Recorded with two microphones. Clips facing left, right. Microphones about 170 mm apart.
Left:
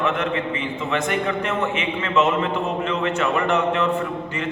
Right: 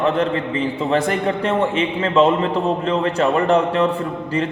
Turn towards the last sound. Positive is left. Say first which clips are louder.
# right 4 dB
turn(degrees=-35)  # may be behind; listen again after turning